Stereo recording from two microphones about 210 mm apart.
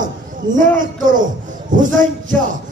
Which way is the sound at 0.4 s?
40° right (ahead or behind).